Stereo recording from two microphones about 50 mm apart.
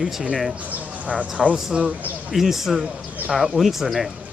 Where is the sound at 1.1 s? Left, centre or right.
Right.